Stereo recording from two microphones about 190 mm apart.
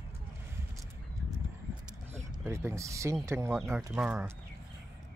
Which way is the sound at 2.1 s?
15° right (ahead or behind).